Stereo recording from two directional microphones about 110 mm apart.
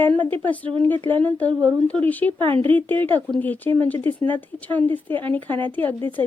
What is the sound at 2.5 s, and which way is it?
Speech, 55° right (ahead or behind).